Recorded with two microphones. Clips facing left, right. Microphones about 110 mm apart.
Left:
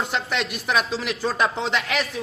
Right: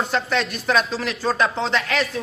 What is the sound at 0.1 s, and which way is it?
A man's voice, 15° left (ahead or behind).